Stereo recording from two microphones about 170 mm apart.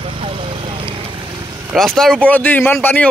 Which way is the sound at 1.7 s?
5° left (ahead or behind).